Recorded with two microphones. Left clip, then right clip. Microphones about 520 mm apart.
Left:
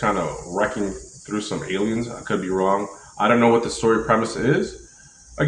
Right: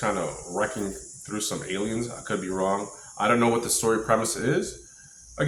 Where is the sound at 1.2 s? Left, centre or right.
Right.